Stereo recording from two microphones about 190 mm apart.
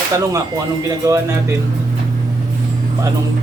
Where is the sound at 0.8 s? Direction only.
15° right (ahead or behind).